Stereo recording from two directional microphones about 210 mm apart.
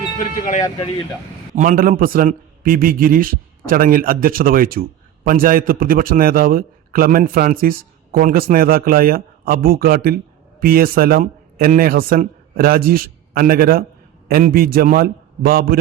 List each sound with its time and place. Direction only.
0.2 s speech: 35° left (ahead or behind)
1.5 s a man's voice: 40° right (ahead or behind)